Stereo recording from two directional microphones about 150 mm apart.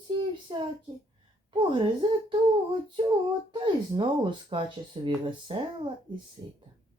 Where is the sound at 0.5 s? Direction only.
30° right (ahead or behind).